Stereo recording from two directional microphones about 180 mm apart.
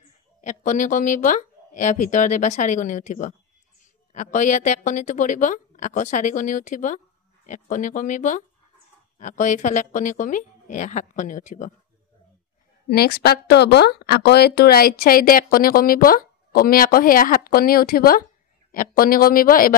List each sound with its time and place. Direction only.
0.4 s speech: 45° left (ahead or behind)
12.8 s speech: 60° left (ahead or behind)